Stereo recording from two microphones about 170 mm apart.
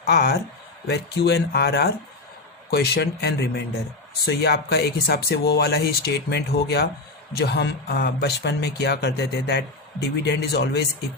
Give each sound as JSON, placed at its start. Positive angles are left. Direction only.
{"t": 0.0, "sound": "speech", "side_deg": 70}